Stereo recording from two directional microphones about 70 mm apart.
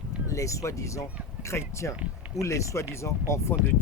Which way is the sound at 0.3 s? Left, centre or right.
Left.